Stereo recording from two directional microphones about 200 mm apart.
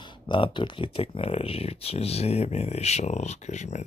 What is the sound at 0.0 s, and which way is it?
Speech, 25° left (ahead or behind).